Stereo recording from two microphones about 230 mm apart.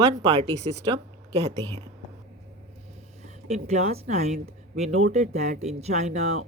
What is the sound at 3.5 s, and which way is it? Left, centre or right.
Speech, right.